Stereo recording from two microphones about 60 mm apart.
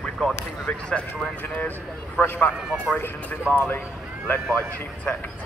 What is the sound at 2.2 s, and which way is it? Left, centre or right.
Speech, left.